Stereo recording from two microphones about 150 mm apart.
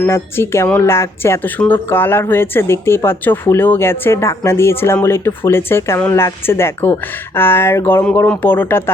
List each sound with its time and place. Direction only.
0.0 s speech: 15° left (ahead or behind)